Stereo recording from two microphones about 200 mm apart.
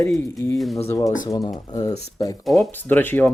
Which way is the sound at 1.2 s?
20° left (ahead or behind).